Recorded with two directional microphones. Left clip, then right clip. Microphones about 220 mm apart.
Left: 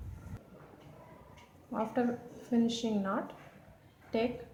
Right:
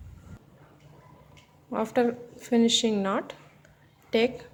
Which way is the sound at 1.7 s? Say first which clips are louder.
Right 8 dB; 50° right (ahead or behind).